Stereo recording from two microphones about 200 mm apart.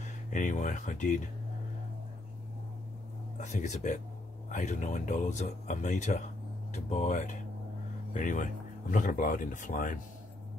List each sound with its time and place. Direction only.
0.0 s speech: 40° left (ahead or behind)
3.3 s speech: 40° left (ahead or behind)